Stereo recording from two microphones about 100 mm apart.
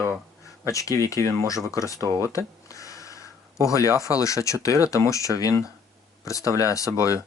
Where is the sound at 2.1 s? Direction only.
25° right (ahead or behind).